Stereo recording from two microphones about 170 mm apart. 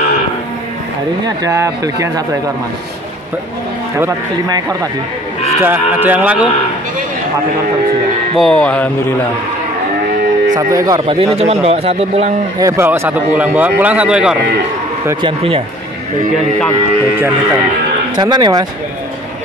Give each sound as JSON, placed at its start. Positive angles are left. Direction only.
{"t": 1.2, "sound": "speech", "side_deg": -20}
{"t": 4.0, "sound": "speech", "side_deg": -20}
{"t": 5.6, "sound": "speech", "side_deg": -10}
{"t": 8.4, "sound": "speech", "side_deg": 5}
{"t": 10.5, "sound": "speech", "side_deg": -20}
{"t": 11.1, "sound": "a man's voice", "side_deg": -35}
{"t": 12.5, "sound": "speech", "side_deg": -15}
{"t": 15.2, "sound": "a man's voice", "side_deg": -35}
{"t": 18.1, "sound": "speech", "side_deg": -25}